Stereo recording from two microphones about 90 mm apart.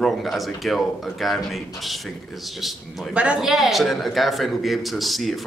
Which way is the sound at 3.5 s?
Centre (ahead or behind).